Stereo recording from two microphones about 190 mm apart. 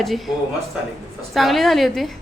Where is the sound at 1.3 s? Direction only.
Centre (ahead or behind).